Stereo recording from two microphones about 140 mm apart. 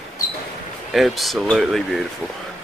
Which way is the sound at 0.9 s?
Centre (ahead or behind).